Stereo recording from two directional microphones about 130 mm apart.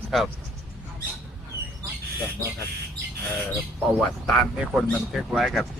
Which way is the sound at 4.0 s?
5° left (ahead or behind).